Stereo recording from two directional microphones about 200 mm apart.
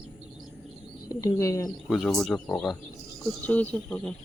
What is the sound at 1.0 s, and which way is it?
Speech, 20° left (ahead or behind).